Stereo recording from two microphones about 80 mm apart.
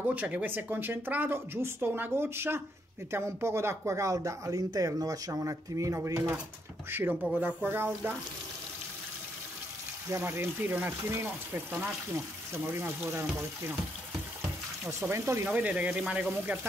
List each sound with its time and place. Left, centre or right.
0.0 s speech: right
6.9 s speech: right
10.1 s speech: right
14.9 s speech: right
15.4 s speech: centre